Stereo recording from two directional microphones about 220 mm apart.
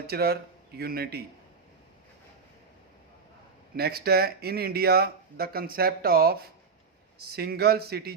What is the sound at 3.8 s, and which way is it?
Speech, 45° right (ahead or behind).